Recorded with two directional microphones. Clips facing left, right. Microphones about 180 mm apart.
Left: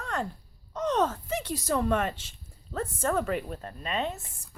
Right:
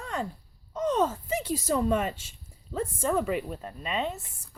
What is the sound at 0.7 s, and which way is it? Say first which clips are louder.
A woman's voice: right 1 dB; 10° right (ahead or behind).